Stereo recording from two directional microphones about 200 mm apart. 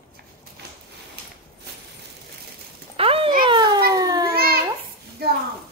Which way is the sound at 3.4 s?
20° right (ahead or behind).